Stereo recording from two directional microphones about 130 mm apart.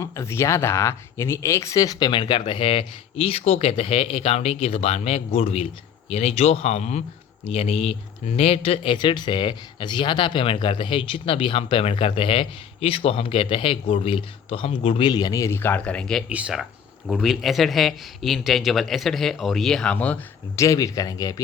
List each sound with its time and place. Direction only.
0.0 s speech: 20° left (ahead or behind); by 15.1 s 45° left (ahead or behind)
15.1 s speech: 30° left (ahead or behind); by 16.2 s 5° left (ahead or behind)
16.3 s speech: 5° right (ahead or behind); by 20.2 s 10° left (ahead or behind)
20.6 s speech: 25° left (ahead or behind)